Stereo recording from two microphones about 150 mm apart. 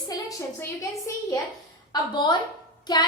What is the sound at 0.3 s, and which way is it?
A woman's voice, 20° left (ahead or behind).